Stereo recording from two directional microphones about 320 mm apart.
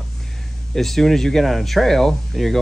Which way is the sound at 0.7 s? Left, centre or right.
Centre.